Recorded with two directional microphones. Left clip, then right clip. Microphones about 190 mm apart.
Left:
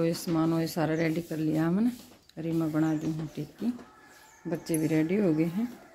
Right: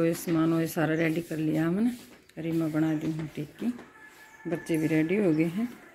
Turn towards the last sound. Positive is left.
turn(degrees=0)  # may be behind; listen again after turning